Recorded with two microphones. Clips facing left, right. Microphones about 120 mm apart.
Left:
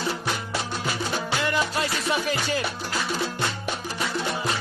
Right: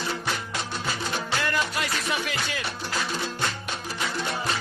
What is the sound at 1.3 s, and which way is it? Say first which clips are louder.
Music: left 2 dB; 20° left (ahead or behind).